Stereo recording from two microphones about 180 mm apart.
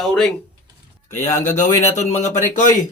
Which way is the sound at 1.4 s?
40° left (ahead or behind).